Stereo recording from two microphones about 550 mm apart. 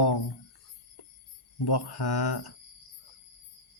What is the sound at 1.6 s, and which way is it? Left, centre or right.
Speech, left.